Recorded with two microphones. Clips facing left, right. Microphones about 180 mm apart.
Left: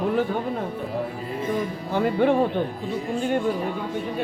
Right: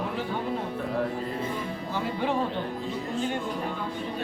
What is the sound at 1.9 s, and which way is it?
Music, 55° left (ahead or behind).